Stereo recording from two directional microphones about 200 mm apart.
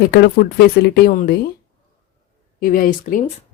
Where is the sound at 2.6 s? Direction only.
45° left (ahead or behind).